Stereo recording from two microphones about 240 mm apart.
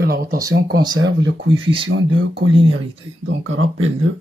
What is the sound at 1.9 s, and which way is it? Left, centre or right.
Speech, right.